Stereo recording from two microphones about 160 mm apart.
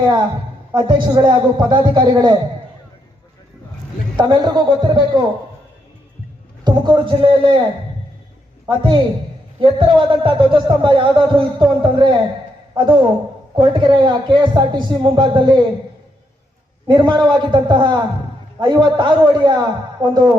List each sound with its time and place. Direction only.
0.7 s speech: 30° right (ahead or behind)
4.2 s speech: 30° right (ahead or behind)
6.7 s speech: 30° right (ahead or behind)
8.6 s speech: 30° right (ahead or behind)
16.8 s speech: 30° right (ahead or behind)